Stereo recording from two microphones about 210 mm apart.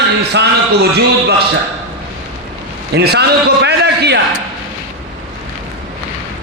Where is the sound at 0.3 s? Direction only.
50° right (ahead or behind).